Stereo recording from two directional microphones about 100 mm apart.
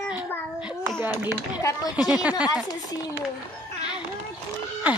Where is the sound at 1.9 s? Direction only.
10° right (ahead or behind).